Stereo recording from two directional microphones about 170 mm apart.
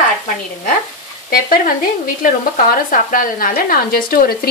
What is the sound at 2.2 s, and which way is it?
Speech, 55° left (ahead or behind).